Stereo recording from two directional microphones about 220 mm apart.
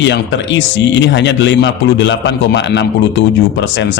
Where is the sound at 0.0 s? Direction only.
55° left (ahead or behind).